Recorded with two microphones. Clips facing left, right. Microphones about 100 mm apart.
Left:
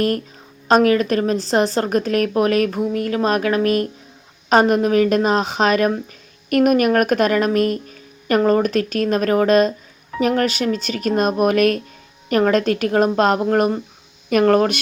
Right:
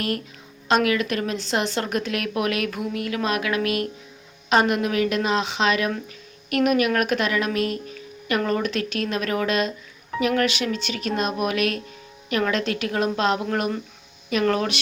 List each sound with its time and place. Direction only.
0.7 s a woman's voice: 40° left (ahead or behind)